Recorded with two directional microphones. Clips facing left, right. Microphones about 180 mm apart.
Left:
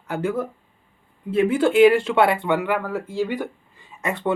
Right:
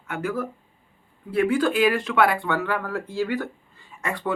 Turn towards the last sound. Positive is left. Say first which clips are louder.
# left 3 dB
turn(degrees=20)  # may be behind; listen again after turning